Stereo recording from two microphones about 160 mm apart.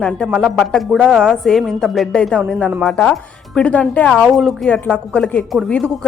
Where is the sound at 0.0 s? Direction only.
Centre (ahead or behind).